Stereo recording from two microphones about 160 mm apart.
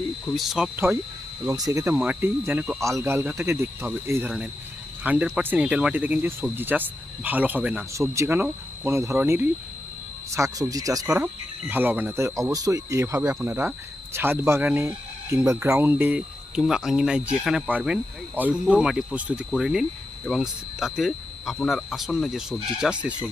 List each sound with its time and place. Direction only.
0.3 s speech: centre (ahead or behind)
1.5 s speech: 20° right (ahead or behind)
7.9 s speech: 20° right (ahead or behind)